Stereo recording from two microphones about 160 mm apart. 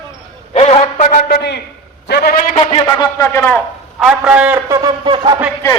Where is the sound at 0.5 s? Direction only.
40° left (ahead or behind); by 2.6 s 65° left (ahead or behind).